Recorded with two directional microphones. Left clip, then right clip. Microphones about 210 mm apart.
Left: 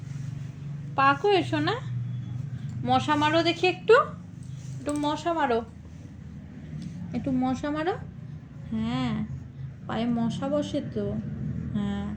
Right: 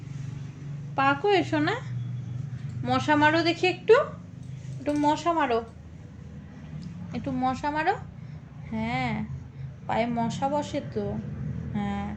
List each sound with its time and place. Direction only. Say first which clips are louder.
0.9 s a woman's voice: left 1 dB; 5° right (ahead or behind)
2.8 s a woman's voice: right 1 dB; 10° right (ahead or behind)
7.1 s a woman's voice: even; 20° right (ahead or behind)
11.7 s vehicle: right 2 dB; 20° right (ahead or behind)